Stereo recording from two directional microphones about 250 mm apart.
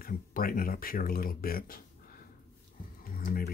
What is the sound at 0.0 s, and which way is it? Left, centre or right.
Speech, left.